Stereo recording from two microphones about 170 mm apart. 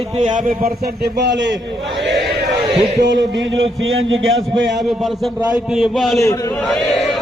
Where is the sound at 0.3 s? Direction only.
50° right (ahead or behind).